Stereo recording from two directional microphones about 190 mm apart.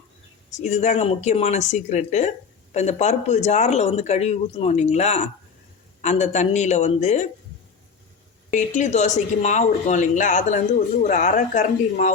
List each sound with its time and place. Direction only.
0.5 s speech: 35° left (ahead or behind)
8.4 s speech: 40° left (ahead or behind)